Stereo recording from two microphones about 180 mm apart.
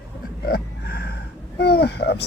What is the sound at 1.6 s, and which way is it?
Speech, 65° left (ahead or behind).